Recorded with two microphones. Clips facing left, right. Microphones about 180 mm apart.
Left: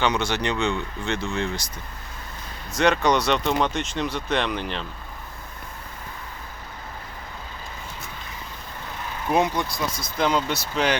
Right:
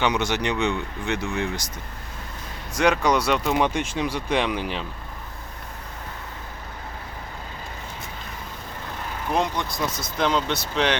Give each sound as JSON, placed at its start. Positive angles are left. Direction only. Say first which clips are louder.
{"t": 0.0, "sound": "speech", "louder": "even", "side_deg": -15}
{"t": 2.7, "sound": "speech", "louder": "even", "side_deg": -10}
{"t": 9.3, "sound": "speech", "louder": "left 3 dB", "side_deg": 5}